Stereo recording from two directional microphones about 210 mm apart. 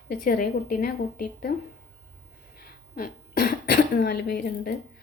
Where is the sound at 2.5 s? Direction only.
45° left (ahead or behind).